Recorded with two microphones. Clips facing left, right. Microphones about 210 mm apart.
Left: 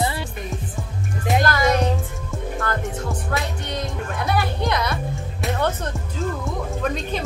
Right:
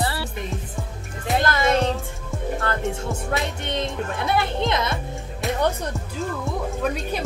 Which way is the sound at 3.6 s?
25° right (ahead or behind).